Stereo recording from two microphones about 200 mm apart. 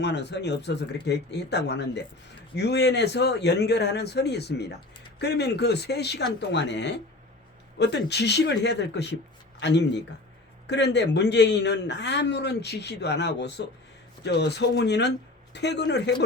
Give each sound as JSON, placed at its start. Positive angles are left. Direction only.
{"t": 0.0, "sound": "a man's voice", "side_deg": 60}